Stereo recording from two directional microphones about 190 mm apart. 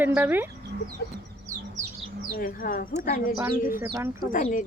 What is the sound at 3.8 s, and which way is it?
Speech, 15° right (ahead or behind).